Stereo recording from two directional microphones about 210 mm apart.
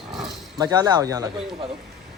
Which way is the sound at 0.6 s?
20° right (ahead or behind).